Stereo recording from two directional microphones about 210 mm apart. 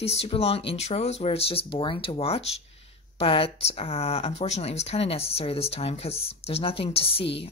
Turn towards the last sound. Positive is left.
turn(degrees=25)  # may be behind; listen again after turning